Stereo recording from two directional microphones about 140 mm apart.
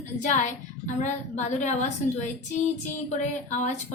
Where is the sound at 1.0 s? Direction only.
60° left (ahead or behind).